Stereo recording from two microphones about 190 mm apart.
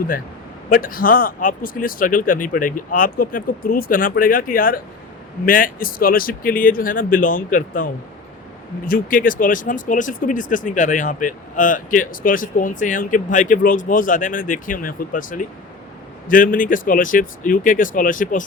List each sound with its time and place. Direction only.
0.7 s speech: 45° left (ahead or behind)
8.9 s speech: 45° left (ahead or behind)